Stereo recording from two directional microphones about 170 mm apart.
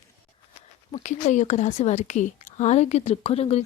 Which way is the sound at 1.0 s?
45° left (ahead or behind).